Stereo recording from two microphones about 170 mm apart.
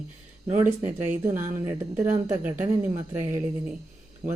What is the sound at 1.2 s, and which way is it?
A woman's voice, 15° right (ahead or behind).